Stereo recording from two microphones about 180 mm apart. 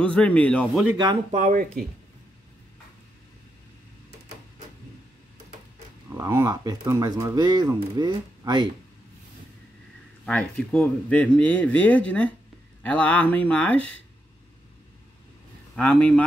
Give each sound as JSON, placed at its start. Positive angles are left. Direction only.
{"t": 0.0, "sound": "speech", "side_deg": 5}
{"t": 1.3, "sound": "speech", "side_deg": -45}
{"t": 6.1, "sound": "speech", "side_deg": -15}
{"t": 10.2, "sound": "speech", "side_deg": 5}
{"t": 15.7, "sound": "speech", "side_deg": 5}